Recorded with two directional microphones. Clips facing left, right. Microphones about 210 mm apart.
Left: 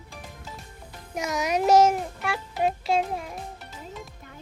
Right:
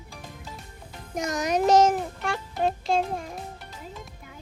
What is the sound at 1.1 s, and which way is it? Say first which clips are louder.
Music: right 1 dB; centre (ahead or behind).